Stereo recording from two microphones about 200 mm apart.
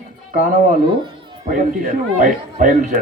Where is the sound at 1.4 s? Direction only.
40° right (ahead or behind).